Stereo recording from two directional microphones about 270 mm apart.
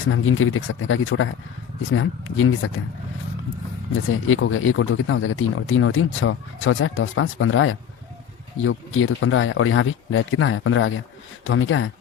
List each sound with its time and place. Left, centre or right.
0.1 s speech: left
4.1 s speech: left